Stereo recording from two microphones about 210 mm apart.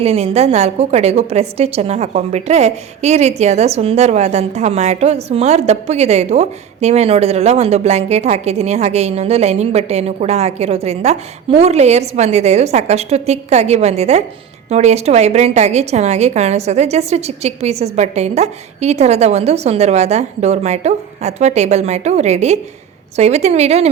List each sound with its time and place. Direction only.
0.0 s a woman's voice: 30° right (ahead or behind)